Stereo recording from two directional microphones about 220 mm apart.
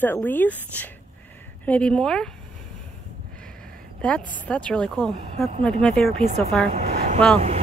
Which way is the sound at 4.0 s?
5° left (ahead or behind).